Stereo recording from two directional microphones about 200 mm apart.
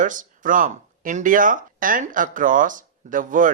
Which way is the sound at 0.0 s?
40° right (ahead or behind).